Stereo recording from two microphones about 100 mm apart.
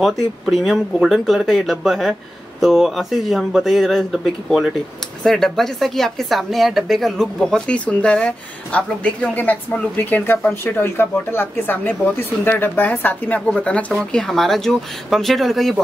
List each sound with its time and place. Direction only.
0.0 s speech: centre (ahead or behind)